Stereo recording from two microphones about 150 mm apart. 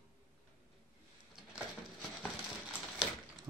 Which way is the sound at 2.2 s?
Centre (ahead or behind).